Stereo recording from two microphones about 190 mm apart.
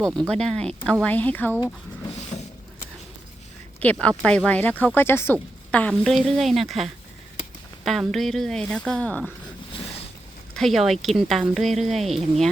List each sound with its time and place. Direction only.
0.2 s speech: 5° left (ahead or behind)
3.8 s a woman's voice: 5° left (ahead or behind)
10.5 s speech: centre (ahead or behind)